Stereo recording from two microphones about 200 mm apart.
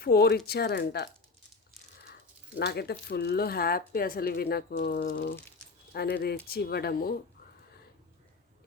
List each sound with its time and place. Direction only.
0.0 s speech: 50° left (ahead or behind)
2.6 s speech: 55° left (ahead or behind)